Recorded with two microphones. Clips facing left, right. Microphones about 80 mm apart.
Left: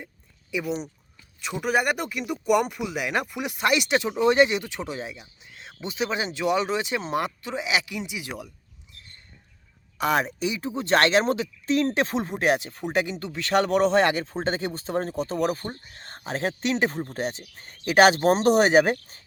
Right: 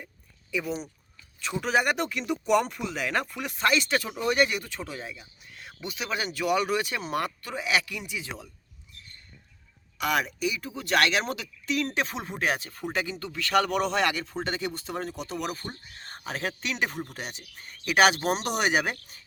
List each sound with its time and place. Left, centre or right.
0.5 s speech: centre
1.7 s speech: centre
10.0 s speech: left